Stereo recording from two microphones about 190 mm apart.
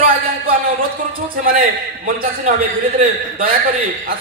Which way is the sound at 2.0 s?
45° right (ahead or behind).